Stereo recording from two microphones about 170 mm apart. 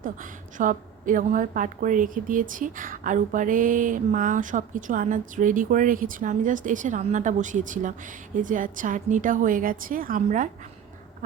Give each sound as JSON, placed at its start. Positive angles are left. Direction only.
{"t": 0.0, "sound": "a woman's voice", "side_deg": -50}